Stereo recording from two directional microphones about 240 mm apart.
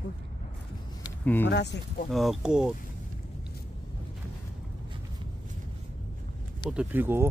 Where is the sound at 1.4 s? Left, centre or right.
Left.